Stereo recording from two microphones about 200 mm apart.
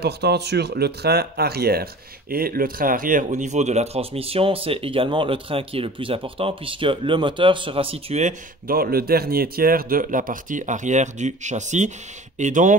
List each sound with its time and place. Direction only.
0.0 s speech: 55° right (ahead or behind); by 12.7 s 40° right (ahead or behind)